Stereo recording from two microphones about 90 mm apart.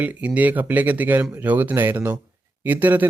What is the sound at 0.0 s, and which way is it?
A man's voice, 15° right (ahead or behind).